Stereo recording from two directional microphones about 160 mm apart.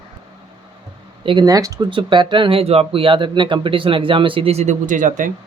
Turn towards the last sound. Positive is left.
turn(degrees=-55)  # may be behind; listen again after turning